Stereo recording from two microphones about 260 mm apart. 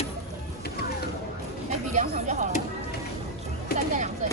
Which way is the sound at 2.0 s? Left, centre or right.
Right.